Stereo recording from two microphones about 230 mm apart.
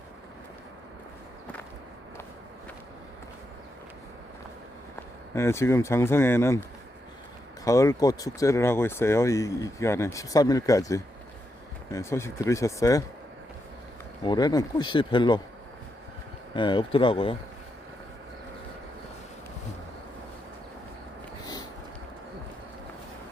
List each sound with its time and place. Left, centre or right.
5.3 s speech: centre
14.3 s speech: centre
16.6 s speech: left